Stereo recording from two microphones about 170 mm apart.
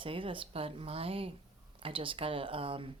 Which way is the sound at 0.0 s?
30° right (ahead or behind).